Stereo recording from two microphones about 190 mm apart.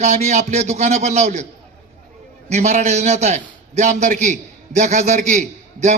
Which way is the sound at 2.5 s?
35° right (ahead or behind).